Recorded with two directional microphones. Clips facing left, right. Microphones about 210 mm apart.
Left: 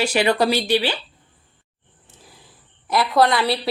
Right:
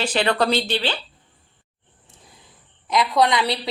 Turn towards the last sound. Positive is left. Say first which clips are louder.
# left 2 dB
turn(degrees=0)  # may be behind; listen again after turning